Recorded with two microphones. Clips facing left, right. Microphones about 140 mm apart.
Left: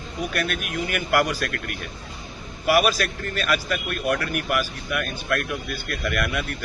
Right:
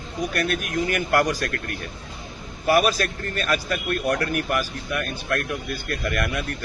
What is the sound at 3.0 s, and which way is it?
Speech, 35° right (ahead or behind).